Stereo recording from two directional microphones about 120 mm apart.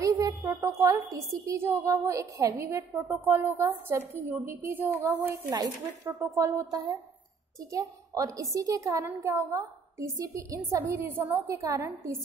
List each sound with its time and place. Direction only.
0.0 s a woman's voice: 30° right (ahead or behind)
11.4 s speech: 25° right (ahead or behind)